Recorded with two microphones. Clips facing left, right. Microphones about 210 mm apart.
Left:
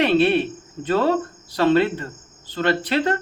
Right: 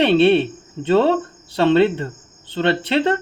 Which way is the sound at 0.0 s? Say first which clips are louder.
Right 4 dB; 30° right (ahead or behind).